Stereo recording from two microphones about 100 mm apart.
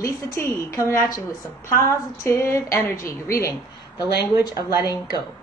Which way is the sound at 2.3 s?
30° left (ahead or behind).